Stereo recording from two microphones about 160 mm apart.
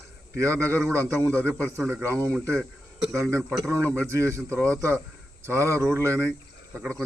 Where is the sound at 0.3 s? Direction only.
15° right (ahead or behind).